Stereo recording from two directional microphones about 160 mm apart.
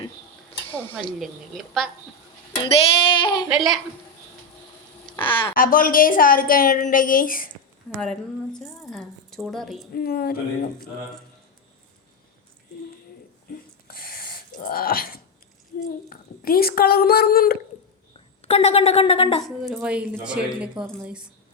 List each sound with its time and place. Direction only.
0.9 s a woman's voice: centre (ahead or behind)
2.6 s speech: 35° left (ahead or behind)
3.5 s a woman's voice: centre (ahead or behind)
5.2 s speech: 30° left (ahead or behind)
5.5 s a woman's voice: 60° left (ahead or behind)
8.0 s a woman's voice: 5° left (ahead or behind)
9.9 s speech: 70° left (ahead or behind)
13.8 s a sound: 70° left (ahead or behind)
16.0 s speech: 65° left (ahead or behind)
18.4 s speech: 40° left (ahead or behind)
19.7 s a woman's voice: 5° right (ahead or behind)